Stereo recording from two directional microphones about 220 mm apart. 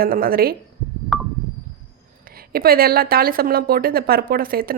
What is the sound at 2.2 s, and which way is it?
A woman's voice, 40° right (ahead or behind).